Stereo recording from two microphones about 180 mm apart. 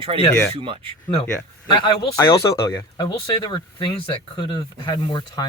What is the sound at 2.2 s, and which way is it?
Speech, 15° left (ahead or behind).